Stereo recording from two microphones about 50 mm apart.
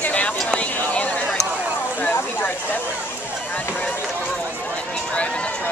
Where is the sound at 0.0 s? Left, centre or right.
Left.